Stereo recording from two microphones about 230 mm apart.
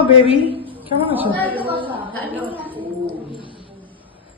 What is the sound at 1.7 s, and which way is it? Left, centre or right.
Speech, right.